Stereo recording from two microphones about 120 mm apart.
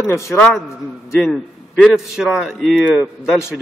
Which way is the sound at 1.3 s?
Centre (ahead or behind).